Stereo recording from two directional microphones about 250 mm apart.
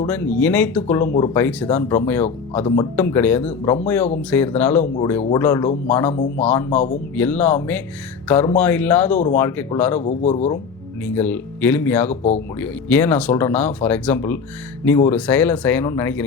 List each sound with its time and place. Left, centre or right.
0.1 s speech: centre
6.7 s a man's voice: left
7.2 s speech: centre
10.0 s a man's voice: left
11.1 s speech: centre